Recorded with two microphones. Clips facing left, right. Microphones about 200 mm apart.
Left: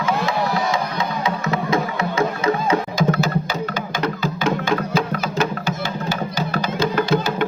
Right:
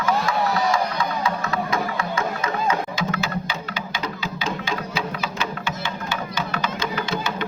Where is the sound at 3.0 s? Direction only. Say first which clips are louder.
Left 7 dB; 40° left (ahead or behind).